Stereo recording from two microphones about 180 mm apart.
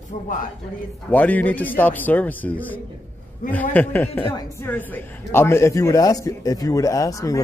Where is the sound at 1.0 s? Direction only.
10° left (ahead or behind).